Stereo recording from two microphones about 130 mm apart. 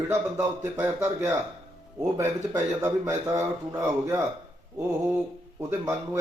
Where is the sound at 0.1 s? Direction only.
20° right (ahead or behind).